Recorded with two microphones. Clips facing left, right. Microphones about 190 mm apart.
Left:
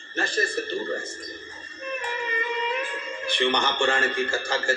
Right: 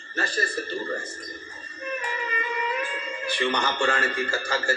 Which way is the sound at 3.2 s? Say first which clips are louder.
Left 2 dB; 25° left (ahead or behind).